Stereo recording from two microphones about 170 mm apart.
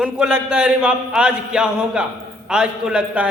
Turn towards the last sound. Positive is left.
turn(degrees=-5)  # may be behind; listen again after turning